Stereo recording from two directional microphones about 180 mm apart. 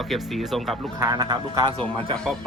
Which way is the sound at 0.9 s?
20° right (ahead or behind).